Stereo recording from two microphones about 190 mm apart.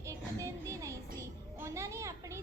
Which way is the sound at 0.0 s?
15° right (ahead or behind).